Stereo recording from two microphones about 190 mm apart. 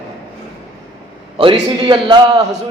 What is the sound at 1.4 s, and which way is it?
Speech, 25° right (ahead or behind).